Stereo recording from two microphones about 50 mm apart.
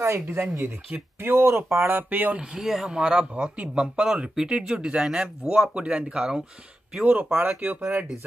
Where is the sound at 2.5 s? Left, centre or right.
Centre.